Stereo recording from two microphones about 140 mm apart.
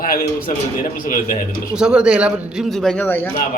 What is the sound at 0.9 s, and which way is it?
Speech, 80° left.